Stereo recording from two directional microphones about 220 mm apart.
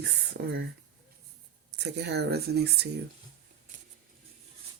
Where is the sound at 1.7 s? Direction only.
50° right (ahead or behind).